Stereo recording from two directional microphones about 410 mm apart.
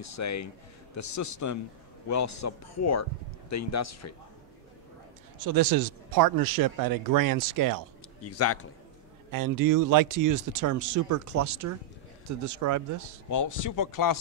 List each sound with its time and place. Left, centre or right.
0.0 s speech: left
5.4 s speech: right
8.2 s speech: left
9.3 s speech: right
13.3 s speech: left